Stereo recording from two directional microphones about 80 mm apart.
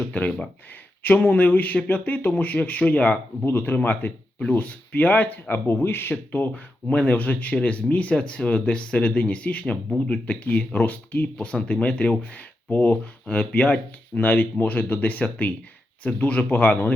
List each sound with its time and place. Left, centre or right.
0.0 s speech: centre
3.4 s speech: left